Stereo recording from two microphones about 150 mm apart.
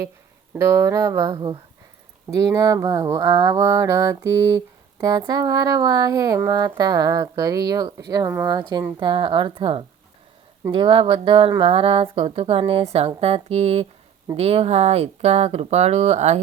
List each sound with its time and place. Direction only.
0.5 s mantra: 20° right (ahead or behind)
9.0 s speech: 35° right (ahead or behind)